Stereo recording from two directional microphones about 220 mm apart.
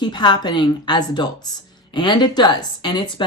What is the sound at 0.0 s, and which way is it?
Speech, 20° left (ahead or behind).